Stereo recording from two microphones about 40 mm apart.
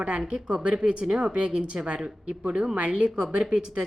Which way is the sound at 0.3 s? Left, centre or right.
Right.